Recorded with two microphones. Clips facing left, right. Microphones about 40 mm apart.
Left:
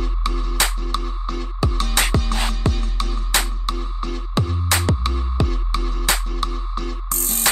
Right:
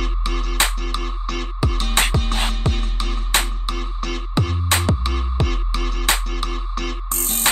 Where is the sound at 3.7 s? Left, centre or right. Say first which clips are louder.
Even; right.